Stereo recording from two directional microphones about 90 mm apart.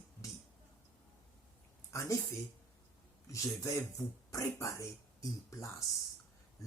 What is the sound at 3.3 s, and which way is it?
Speech, 35° left (ahead or behind).